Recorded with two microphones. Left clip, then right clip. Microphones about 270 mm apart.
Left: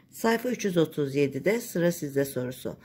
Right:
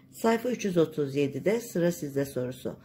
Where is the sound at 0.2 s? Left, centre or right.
Centre.